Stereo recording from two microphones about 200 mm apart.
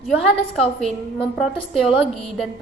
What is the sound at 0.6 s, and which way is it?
A woman's voice, centre (ahead or behind).